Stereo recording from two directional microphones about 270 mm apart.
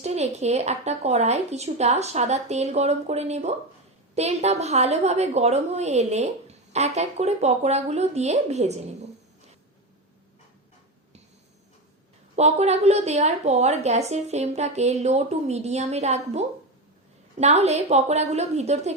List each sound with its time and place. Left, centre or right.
0.0 s a woman's voice: right
12.4 s a woman's voice: right
17.4 s a woman's voice: right